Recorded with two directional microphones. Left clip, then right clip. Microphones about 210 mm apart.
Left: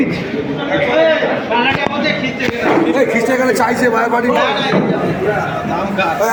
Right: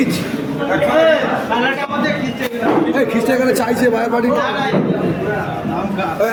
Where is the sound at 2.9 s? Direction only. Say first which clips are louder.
Left 2 dB; 35° right (ahead or behind).